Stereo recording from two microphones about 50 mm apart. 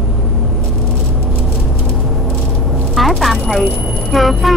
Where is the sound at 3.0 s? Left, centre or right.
Centre.